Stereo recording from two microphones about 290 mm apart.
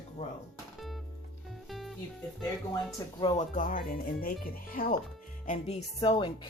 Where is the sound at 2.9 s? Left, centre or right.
Centre.